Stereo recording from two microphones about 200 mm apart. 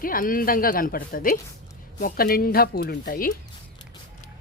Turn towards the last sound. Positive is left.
turn(degrees=45)  # may be behind; listen again after turning